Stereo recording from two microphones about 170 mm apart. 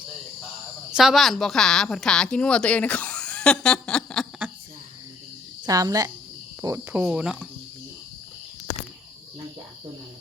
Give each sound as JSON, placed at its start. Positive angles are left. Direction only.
{"t": 0.9, "sound": "a woman's voice", "side_deg": 0}
{"t": 5.6, "sound": "speech", "side_deg": -20}